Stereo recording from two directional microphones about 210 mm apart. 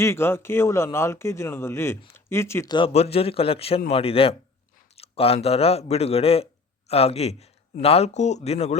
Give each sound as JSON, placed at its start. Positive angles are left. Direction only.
{"t": 0.0, "sound": "a man's voice", "side_deg": 10}